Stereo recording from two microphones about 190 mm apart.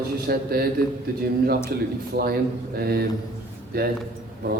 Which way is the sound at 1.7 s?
55° right (ahead or behind).